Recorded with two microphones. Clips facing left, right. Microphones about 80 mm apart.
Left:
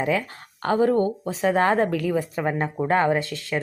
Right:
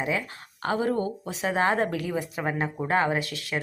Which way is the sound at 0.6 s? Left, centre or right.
Left.